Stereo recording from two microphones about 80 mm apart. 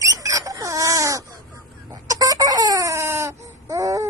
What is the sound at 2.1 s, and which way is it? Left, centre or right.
Baby cry, right.